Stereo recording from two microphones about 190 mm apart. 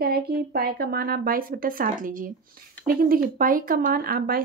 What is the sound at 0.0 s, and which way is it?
Speech, 55° right (ahead or behind).